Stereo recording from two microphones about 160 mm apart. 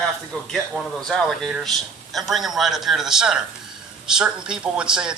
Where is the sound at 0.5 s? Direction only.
Centre (ahead or behind).